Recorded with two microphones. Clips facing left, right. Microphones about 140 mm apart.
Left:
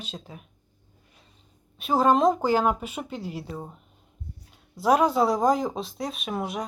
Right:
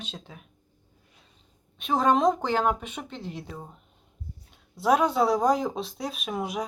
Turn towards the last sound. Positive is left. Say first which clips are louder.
# even
turn(degrees=0)  # may be behind; listen again after turning